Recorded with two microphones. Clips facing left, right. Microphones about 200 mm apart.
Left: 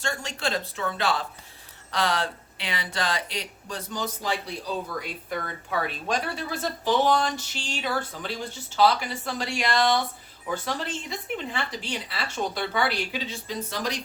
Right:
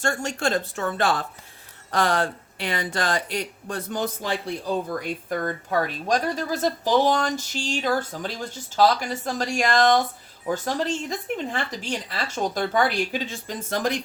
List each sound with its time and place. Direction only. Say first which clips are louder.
0.0 s speech: right 5 dB; 50° right (ahead or behind)